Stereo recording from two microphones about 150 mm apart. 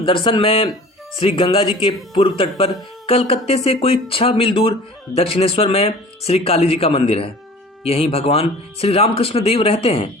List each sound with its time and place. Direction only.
0.0 s speech: 35° left (ahead or behind)